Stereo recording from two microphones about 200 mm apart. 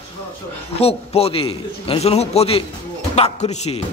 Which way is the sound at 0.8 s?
30° left (ahead or behind).